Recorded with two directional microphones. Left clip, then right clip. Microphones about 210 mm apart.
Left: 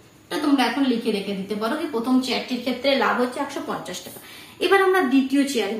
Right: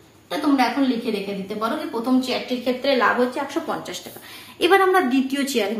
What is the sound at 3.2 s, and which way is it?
A woman's voice, 45° right (ahead or behind).